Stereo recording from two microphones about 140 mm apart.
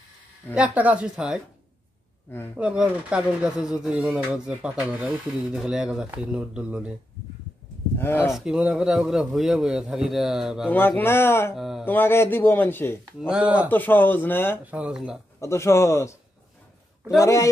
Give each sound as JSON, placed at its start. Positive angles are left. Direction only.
{"t": 0.6, "sound": "speech", "side_deg": -10}
{"t": 2.5, "sound": "speech", "side_deg": -10}
{"t": 8.0, "sound": "speech", "side_deg": 15}
{"t": 8.3, "sound": "a man's voice", "side_deg": -5}
{"t": 10.7, "sound": "speech", "side_deg": 15}
{"t": 11.5, "sound": "a man's voice", "side_deg": 0}
{"t": 11.8, "sound": "speech", "side_deg": 15}
{"t": 13.3, "sound": "speech", "side_deg": -10}
{"t": 13.7, "sound": "speech", "side_deg": 15}
{"t": 14.7, "sound": "a man's voice", "side_deg": -10}
{"t": 15.4, "sound": "a man's voice", "side_deg": 20}
{"t": 17.2, "sound": "a man's voice", "side_deg": 20}